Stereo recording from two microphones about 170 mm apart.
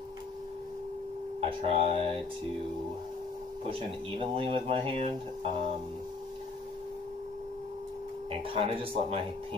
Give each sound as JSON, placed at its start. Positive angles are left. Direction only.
{"t": 1.4, "sound": "speech", "side_deg": -35}
{"t": 4.2, "sound": "speech", "side_deg": -30}
{"t": 8.3, "sound": "speech", "side_deg": -30}